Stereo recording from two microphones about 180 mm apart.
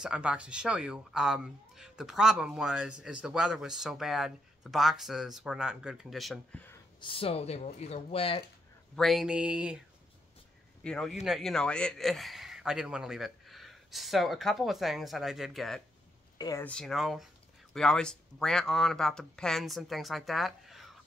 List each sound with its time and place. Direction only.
0.0 s a man's voice: 5° right (ahead or behind)
7.0 s speech: 30° left (ahead or behind)
8.9 s a man's voice: centre (ahead or behind)
10.8 s a man's voice: 5° left (ahead or behind)
16.3 s speech: 20° left (ahead or behind)
16.6 s a man's voice: 5° left (ahead or behind)